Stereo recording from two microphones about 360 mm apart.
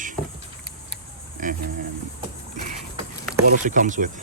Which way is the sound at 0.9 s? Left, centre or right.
Right.